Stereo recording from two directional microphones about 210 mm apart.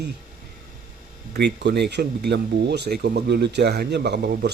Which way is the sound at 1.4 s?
55° right (ahead or behind).